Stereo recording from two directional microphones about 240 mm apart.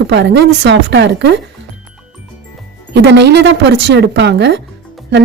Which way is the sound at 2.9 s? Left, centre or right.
Right.